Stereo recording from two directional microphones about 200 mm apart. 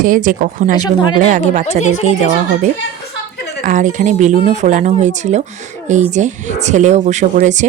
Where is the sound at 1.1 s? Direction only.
40° right (ahead or behind).